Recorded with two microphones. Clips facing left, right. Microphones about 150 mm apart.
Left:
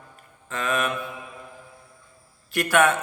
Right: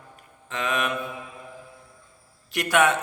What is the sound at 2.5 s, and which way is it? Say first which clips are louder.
Mantra: left 1 dB; 20° right (ahead or behind).